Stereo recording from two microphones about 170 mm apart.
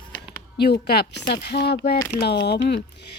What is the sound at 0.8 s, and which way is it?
A woman's voice, 70° left (ahead or behind).